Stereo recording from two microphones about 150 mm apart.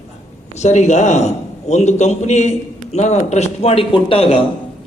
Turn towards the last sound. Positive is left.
turn(degrees=35)  # may be behind; listen again after turning